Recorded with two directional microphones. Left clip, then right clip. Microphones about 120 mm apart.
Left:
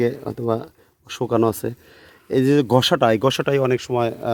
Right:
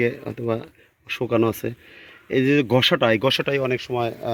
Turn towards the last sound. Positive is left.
turn(degrees=45)  # may be behind; listen again after turning